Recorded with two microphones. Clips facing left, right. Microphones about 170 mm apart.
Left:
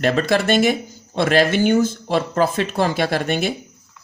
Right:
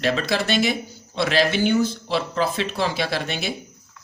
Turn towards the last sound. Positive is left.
turn(degrees=50)  # may be behind; listen again after turning